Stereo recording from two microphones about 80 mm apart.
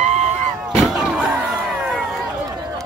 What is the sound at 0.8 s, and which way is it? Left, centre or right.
Slam, centre.